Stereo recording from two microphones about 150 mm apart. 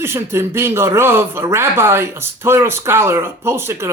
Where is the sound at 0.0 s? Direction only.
15° right (ahead or behind).